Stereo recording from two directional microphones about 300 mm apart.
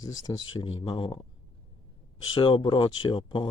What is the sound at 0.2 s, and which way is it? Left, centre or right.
Speech, centre.